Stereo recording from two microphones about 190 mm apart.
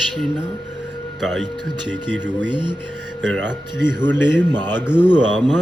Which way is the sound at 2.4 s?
25° right (ahead or behind).